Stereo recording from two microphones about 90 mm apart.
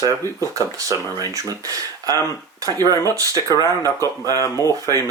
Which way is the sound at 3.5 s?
35° left (ahead or behind).